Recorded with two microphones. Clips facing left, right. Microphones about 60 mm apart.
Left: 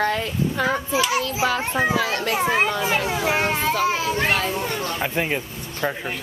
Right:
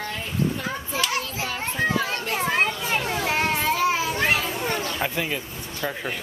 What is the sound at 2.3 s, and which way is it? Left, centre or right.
Children playing, centre.